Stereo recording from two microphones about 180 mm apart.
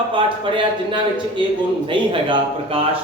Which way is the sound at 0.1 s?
25° right (ahead or behind).